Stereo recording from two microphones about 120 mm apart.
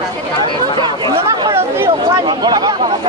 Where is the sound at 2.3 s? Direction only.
35° right (ahead or behind).